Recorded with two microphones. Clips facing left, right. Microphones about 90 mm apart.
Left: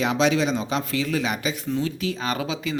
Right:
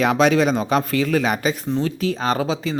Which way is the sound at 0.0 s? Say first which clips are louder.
Right 5 dB; 50° right (ahead or behind).